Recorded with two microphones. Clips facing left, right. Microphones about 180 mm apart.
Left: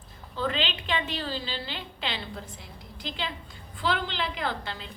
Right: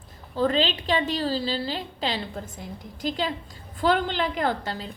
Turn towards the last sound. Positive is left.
turn(degrees=-40)  # may be behind; listen again after turning